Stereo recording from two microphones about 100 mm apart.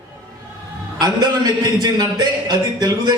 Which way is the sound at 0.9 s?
45° right (ahead or behind).